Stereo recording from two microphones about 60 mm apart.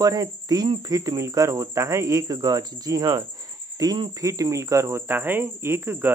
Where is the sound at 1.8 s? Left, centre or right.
Right.